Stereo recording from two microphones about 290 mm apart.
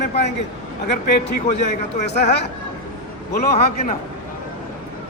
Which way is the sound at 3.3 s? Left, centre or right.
Left.